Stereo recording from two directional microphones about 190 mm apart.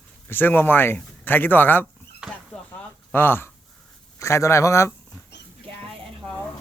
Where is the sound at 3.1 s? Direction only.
10° left (ahead or behind).